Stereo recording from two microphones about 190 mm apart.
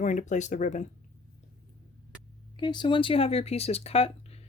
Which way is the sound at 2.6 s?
25° left (ahead or behind).